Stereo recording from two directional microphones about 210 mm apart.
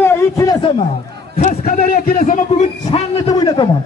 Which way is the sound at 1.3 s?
40° left (ahead or behind).